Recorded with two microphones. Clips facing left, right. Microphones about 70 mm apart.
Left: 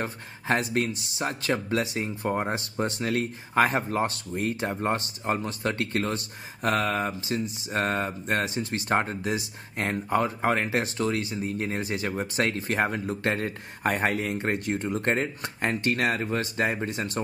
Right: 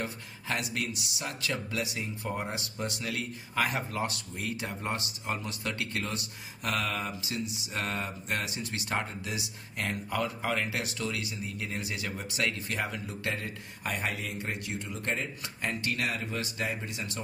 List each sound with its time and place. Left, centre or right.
0.0 s speech: left